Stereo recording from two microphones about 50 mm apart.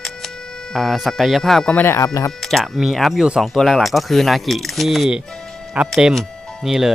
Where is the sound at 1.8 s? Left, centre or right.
Left.